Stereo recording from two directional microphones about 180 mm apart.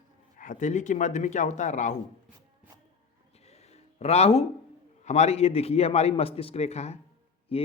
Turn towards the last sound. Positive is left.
turn(degrees=30)  # may be behind; listen again after turning